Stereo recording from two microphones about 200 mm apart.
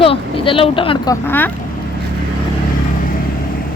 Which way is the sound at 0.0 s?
25° left (ahead or behind).